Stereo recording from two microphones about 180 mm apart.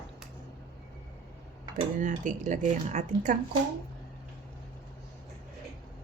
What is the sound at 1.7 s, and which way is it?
Speech, 45° right (ahead or behind).